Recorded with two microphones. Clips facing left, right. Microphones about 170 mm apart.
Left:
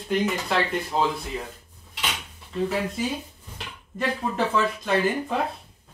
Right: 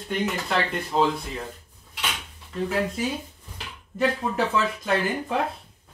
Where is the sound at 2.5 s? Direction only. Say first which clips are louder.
Even; centre (ahead or behind).